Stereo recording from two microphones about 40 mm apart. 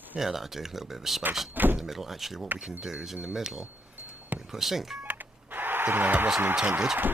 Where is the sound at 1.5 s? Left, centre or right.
Right.